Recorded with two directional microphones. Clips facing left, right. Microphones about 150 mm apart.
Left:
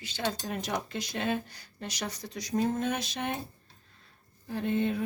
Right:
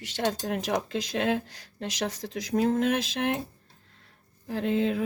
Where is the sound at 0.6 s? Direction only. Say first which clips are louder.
Right 5 dB; 90° right.